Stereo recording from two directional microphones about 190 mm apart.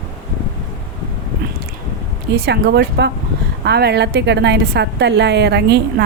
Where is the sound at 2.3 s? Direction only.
60° right (ahead or behind).